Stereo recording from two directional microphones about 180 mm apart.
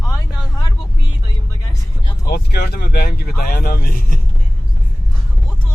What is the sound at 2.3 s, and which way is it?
Vehicle, 65° left (ahead or behind).